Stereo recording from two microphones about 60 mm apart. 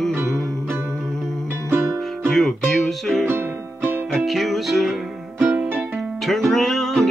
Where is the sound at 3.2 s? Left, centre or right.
Right.